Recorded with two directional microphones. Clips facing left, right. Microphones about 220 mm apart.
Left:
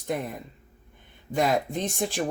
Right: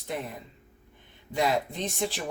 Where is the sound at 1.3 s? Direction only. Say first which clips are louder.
Left 3 dB; 50° left (ahead or behind).